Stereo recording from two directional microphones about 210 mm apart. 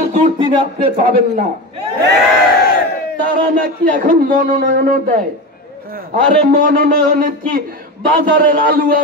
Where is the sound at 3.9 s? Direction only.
40° right (ahead or behind).